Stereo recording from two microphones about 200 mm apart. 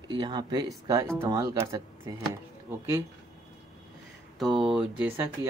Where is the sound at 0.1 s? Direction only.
20° right (ahead or behind).